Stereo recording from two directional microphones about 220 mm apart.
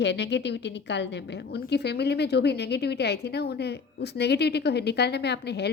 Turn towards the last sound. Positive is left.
turn(degrees=50)  # may be behind; listen again after turning